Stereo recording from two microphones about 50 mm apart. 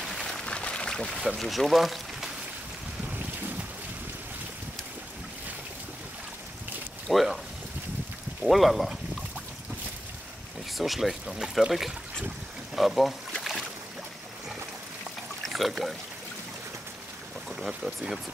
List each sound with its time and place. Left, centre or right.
0.0 s a sound: centre
0.5 s pour: centre
1.4 s speech: centre
3.1 s boat: right
7.1 s boat: centre
8.5 s speech: centre
10.8 s speech: centre
13.4 s boat: centre
15.4 s speech: centre
17.5 s speech: centre